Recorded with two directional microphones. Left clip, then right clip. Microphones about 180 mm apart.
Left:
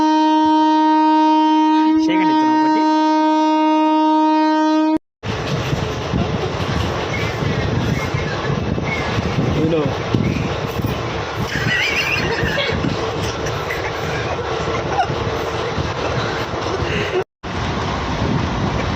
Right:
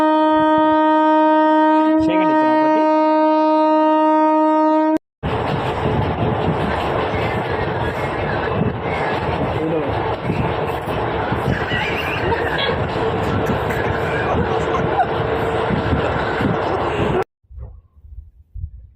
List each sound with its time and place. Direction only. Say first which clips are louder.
0.0 s shofar: even; 10° right (ahead or behind)
2.0 s shofar: even; 10° left (ahead or behind)
2.6 s shofar: right 1 dB; 20° right (ahead or behind)
3.3 s siren: right 1 dB; 15° right (ahead or behind)